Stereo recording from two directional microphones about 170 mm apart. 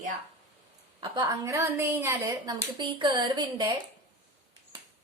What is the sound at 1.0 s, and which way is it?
A woman's voice, 25° right (ahead or behind).